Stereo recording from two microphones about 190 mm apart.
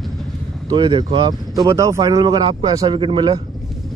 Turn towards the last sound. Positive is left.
turn(degrees=-25)  # may be behind; listen again after turning